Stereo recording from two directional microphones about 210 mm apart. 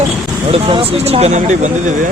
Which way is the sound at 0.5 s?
25° right (ahead or behind).